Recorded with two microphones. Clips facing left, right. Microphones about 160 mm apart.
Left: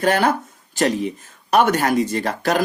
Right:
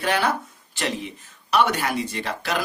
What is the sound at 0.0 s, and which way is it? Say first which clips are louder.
Speech: left 5 dB; 45° left (ahead or behind).